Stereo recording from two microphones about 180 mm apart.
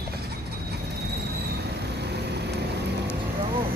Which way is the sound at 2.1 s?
65° right (ahead or behind).